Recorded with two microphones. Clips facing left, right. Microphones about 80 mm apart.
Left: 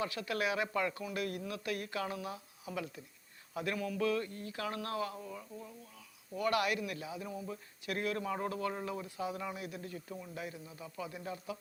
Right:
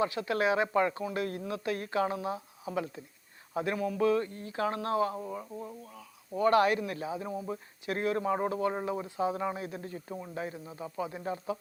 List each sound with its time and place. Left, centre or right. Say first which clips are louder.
0.0 s speech: right 7 dB; right